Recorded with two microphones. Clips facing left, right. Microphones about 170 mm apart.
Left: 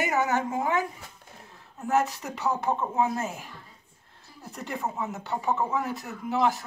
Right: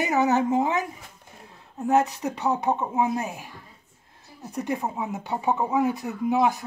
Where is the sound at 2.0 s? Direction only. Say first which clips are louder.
Right 2 dB; 15° right (ahead or behind).